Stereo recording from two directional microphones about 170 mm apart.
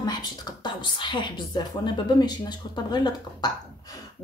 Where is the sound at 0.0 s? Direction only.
25° left (ahead or behind).